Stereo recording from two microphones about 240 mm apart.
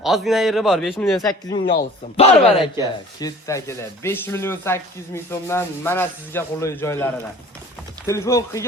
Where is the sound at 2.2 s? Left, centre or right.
Left.